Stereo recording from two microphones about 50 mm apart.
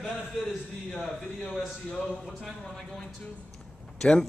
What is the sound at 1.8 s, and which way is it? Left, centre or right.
Speech, centre.